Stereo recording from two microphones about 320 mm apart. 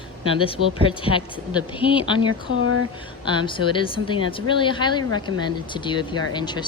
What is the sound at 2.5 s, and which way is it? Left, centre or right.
Speech, right.